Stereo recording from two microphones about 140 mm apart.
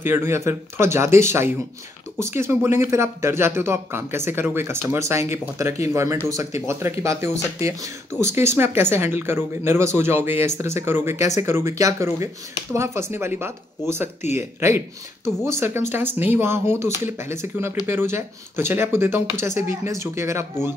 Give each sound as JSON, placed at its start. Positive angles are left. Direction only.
{"t": 0.0, "sound": "speech", "side_deg": -15}